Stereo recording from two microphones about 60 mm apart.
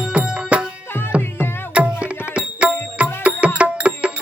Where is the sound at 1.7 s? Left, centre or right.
Centre.